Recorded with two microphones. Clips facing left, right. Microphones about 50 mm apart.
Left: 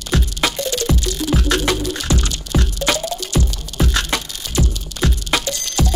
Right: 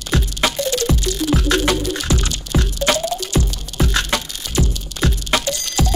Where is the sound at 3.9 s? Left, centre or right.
Right.